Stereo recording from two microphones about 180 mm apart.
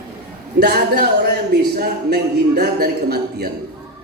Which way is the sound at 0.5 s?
65° right (ahead or behind).